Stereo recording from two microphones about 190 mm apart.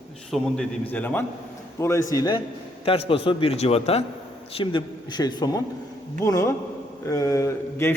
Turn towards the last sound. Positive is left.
turn(degrees=15)  # may be behind; listen again after turning